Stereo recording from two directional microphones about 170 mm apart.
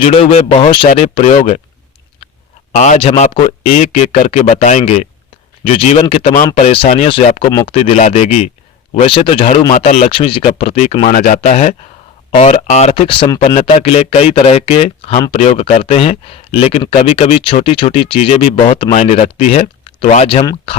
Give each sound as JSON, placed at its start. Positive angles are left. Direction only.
{"t": 0.0, "sound": "speech", "side_deg": 35}
{"t": 2.7, "sound": "speech", "side_deg": 45}
{"t": 6.6, "sound": "speech", "side_deg": 35}
{"t": 9.7, "sound": "speech", "side_deg": 45}
{"t": 11.0, "sound": "speech", "side_deg": 50}